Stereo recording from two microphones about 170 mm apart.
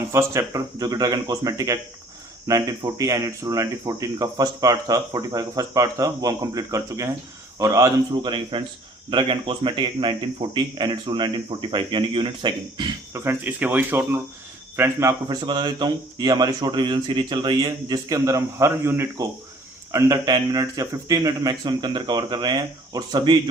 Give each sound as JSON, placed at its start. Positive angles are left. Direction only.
{"t": 0.1, "sound": "speech", "side_deg": -15}
{"t": 13.2, "sound": "speech", "side_deg": -10}